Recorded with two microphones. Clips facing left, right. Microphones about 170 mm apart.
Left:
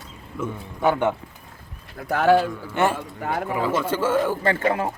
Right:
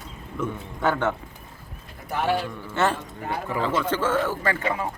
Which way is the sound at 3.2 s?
85° left.